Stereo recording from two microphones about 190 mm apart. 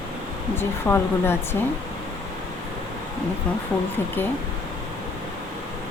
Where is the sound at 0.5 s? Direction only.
10° left (ahead or behind).